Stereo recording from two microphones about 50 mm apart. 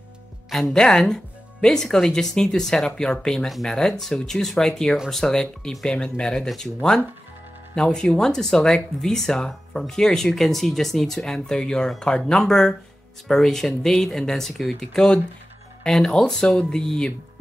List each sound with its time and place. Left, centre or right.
0.5 s speech: centre
0.7 s speech: centre
15.8 s speech: centre